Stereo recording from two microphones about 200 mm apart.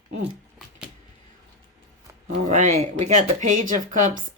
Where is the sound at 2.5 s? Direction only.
35° right (ahead or behind).